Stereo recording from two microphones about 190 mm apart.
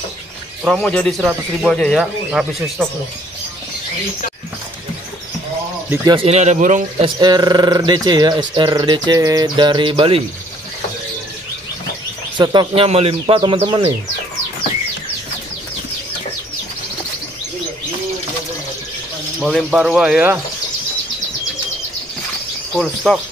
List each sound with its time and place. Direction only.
0.7 s speech: centre (ahead or behind)
6.0 s a man's voice: 30° right (ahead or behind)
7.2 s speech: 20° right (ahead or behind)
12.4 s speech: 25° right (ahead or behind)
19.4 s speech: centre (ahead or behind)
23.0 s speech: centre (ahead or behind)